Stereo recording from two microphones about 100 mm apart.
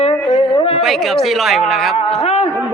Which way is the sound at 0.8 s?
Centre (ahead or behind).